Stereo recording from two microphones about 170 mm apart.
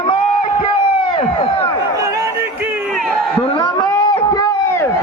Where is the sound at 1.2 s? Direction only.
35° left (ahead or behind).